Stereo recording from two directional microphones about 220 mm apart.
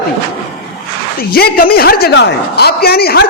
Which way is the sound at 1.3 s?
40° left (ahead or behind).